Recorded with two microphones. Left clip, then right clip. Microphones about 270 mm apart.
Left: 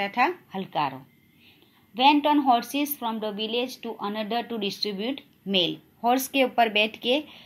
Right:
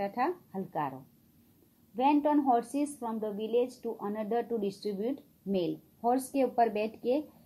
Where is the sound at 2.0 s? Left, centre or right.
Left.